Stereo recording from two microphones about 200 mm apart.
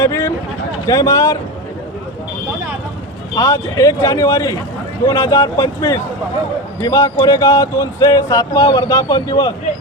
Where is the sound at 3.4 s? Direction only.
15° left (ahead or behind).